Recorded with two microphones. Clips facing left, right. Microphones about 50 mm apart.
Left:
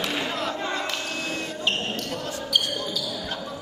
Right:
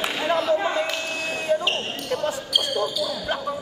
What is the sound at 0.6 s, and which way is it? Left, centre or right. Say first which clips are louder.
Basketball bounce: right 5 dB; centre.